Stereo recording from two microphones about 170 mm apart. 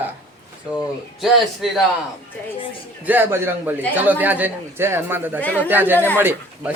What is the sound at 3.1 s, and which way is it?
A man's voice, 15° right (ahead or behind).